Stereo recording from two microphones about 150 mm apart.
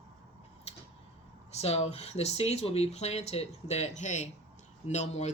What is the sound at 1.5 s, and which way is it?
Speech, 45° left (ahead or behind).